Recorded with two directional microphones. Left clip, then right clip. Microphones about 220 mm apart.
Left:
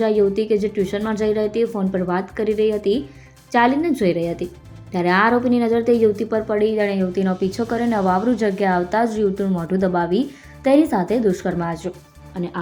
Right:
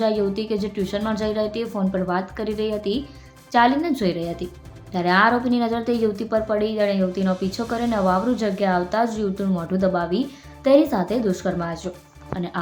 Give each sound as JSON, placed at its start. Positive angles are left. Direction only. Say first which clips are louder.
{"t": 0.0, "sound": "a woman's voice", "louder": "left 4 dB", "side_deg": 10}